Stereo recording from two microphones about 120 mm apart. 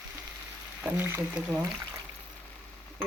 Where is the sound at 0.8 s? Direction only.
20° right (ahead or behind).